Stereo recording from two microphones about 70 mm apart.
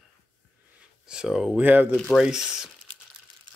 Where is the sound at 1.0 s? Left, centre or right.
Centre.